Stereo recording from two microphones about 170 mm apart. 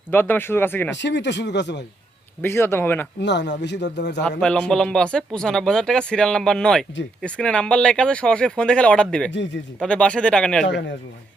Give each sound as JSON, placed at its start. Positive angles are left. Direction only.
{"t": 0.1, "sound": "speech", "side_deg": 10}
{"t": 0.9, "sound": "speech", "side_deg": 90}
{"t": 2.4, "sound": "speech", "side_deg": 15}
{"t": 3.2, "sound": "speech", "side_deg": 90}
{"t": 4.2, "sound": "speech", "side_deg": 5}
{"t": 10.7, "sound": "speech", "side_deg": 90}